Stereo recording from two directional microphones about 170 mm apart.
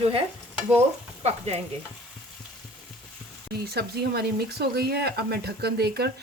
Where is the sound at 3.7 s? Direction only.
70° right (ahead or behind).